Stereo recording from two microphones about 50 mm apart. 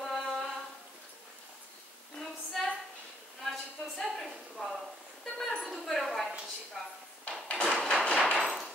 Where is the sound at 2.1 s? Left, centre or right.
Centre.